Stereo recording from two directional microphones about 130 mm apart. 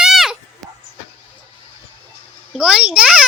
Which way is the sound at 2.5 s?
5° right (ahead or behind).